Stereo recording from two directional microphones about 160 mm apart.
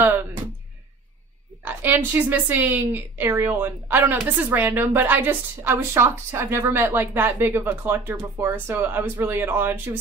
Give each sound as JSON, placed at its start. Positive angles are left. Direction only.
{"t": 1.6, "sound": "speech", "side_deg": -10}